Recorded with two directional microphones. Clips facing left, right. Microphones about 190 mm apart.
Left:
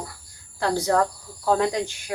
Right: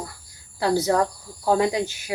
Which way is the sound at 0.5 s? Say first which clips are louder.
Right 1 dB; 10° right (ahead or behind).